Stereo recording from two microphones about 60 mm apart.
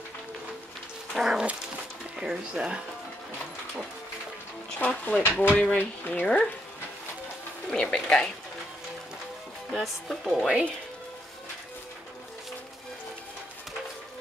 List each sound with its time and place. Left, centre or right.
1.1 s dog: centre
2.1 s speech: centre
4.7 s speech: left
5.2 s speech: left
5.6 s speech: left
6.2 s speech: centre
7.7 s speech: centre
9.7 s speech: centre